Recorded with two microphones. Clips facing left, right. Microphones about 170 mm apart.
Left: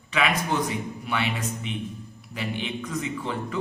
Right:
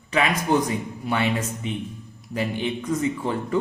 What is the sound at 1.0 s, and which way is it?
Speech, 40° right (ahead or behind).